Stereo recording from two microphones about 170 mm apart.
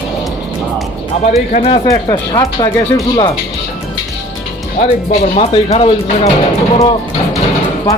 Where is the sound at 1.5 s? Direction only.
35° left (ahead or behind).